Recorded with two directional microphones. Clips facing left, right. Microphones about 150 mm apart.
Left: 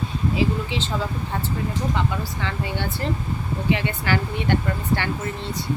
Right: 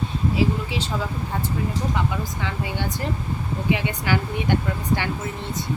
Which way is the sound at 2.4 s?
15° right (ahead or behind).